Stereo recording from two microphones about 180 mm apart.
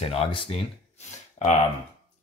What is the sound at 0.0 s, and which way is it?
Speech, 30° left (ahead or behind).